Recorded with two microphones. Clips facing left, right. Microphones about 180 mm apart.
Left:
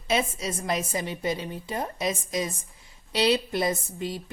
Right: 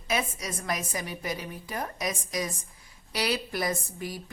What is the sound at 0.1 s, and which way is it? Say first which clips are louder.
A woman's voice: left 4 dB; 25° left (ahead or behind).